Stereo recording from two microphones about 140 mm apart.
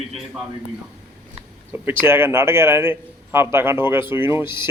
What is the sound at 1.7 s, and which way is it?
A man's voice, 15° right (ahead or behind).